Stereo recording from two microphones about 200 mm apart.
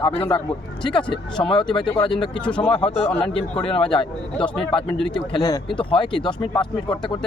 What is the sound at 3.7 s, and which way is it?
Speech, 25° left (ahead or behind).